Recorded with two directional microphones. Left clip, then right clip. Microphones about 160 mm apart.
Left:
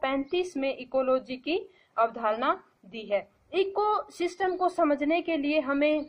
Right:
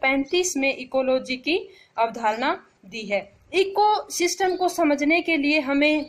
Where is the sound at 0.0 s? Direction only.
25° right (ahead or behind).